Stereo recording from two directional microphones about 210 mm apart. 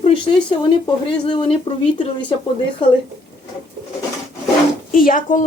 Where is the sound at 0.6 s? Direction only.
20° left (ahead or behind).